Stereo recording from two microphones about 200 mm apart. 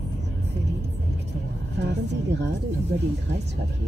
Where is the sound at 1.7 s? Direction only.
60° right (ahead or behind).